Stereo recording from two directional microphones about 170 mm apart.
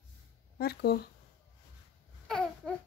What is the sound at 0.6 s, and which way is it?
Speech, 65° left (ahead or behind).